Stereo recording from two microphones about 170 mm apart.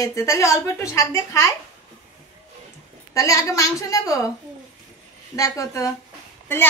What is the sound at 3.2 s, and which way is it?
A woman's voice, 20° left (ahead or behind).